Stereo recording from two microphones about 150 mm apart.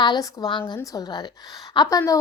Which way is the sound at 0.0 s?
25° left (ahead or behind).